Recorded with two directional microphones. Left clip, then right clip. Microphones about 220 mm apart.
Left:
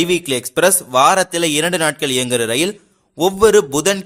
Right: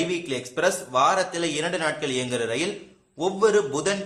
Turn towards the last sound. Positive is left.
turn(degrees=50)  # may be behind; listen again after turning